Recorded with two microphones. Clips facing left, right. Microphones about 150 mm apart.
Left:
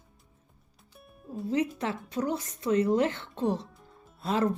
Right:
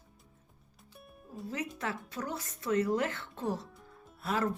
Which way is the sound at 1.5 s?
20° left (ahead or behind).